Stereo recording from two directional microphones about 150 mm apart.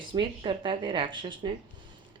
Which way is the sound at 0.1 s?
35° right (ahead or behind).